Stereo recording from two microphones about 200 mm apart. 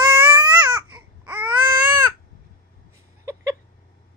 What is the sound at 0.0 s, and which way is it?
Baby cry, 15° right (ahead or behind).